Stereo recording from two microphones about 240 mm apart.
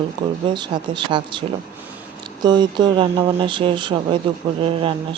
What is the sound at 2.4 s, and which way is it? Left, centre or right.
Speech, centre.